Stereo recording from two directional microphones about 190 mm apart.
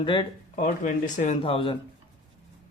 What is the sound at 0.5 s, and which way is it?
Speech, 40° left (ahead or behind).